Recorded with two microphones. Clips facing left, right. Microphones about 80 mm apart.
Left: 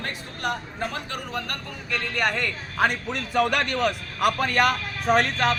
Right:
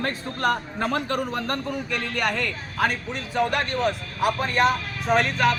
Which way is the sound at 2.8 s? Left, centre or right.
Left.